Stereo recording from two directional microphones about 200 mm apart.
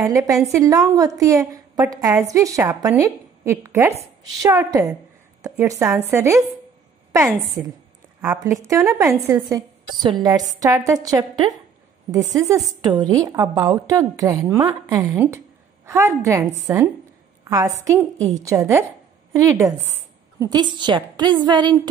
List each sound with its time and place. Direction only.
0.0 s a woman's voice: 15° right (ahead or behind)